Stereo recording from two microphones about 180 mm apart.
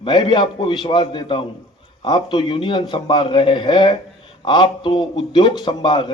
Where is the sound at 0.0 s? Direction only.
25° left (ahead or behind).